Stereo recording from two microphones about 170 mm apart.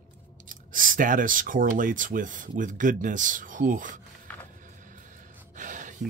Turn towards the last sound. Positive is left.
turn(degrees=-50)  # may be behind; listen again after turning